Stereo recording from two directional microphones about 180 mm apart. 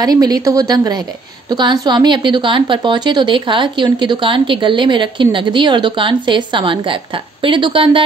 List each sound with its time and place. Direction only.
0.0 s a woman's voice: 20° right (ahead or behind)